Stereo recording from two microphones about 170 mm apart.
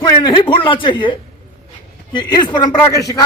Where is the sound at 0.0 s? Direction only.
25° left (ahead or behind).